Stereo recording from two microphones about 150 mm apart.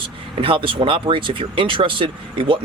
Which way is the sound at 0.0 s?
35° right (ahead or behind).